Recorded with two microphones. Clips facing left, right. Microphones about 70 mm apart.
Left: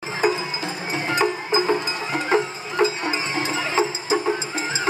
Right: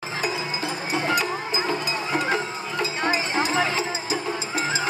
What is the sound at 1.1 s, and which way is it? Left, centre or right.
Music, left.